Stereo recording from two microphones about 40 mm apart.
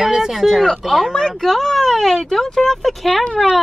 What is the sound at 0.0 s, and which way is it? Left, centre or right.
Speech, centre.